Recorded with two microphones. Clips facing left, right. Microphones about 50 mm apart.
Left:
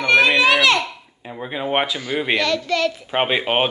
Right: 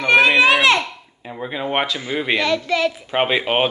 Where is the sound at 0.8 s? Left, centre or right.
Centre.